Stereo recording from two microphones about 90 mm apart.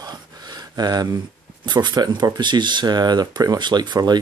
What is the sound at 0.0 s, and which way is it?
Gasp, 50° right (ahead or behind).